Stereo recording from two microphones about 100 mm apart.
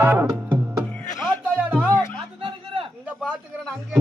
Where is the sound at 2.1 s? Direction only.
60° right (ahead or behind).